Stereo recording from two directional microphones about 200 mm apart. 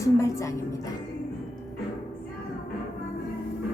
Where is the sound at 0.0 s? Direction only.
15° left (ahead or behind).